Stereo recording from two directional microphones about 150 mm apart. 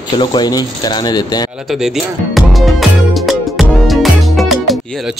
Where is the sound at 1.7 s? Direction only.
Centre (ahead or behind).